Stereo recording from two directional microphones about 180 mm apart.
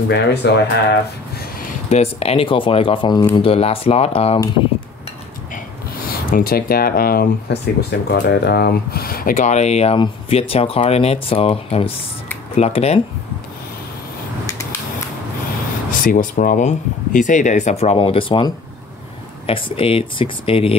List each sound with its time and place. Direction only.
0.1 s speech: 65° left (ahead or behind)
1.9 s speech: 35° left (ahead or behind)
6.3 s speech: 55° left (ahead or behind); by 13.0 s 35° left (ahead or behind)
16.0 s speech: 50° left (ahead or behind); by 20.7 s 30° left (ahead or behind)